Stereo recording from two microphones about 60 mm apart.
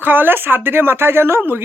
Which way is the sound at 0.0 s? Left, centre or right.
Right.